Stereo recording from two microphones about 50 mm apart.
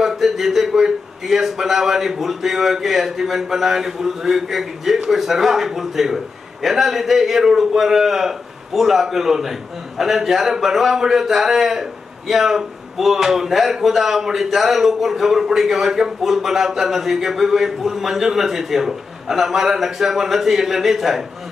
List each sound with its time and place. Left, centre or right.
0.0 s a man's voice: centre